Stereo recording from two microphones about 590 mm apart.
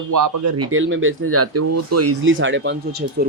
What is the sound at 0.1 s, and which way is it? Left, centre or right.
Speech, right.